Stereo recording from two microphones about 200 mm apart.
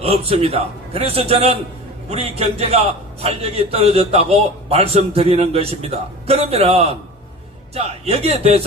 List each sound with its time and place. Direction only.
0.0 s a man's voice: 30° right (ahead or behind)